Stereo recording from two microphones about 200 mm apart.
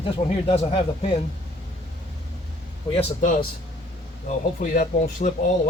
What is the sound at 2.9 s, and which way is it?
A man's voice, 35° left (ahead or behind).